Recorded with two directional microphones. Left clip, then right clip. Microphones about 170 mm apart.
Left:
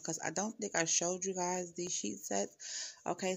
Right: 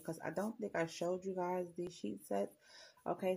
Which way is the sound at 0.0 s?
55° left (ahead or behind).